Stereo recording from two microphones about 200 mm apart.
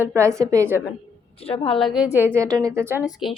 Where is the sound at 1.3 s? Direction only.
30° left (ahead or behind).